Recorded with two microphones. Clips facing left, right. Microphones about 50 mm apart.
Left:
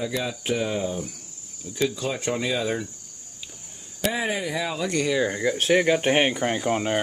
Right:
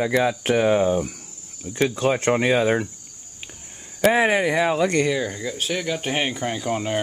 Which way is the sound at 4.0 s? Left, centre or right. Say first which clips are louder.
Right 8 dB; right.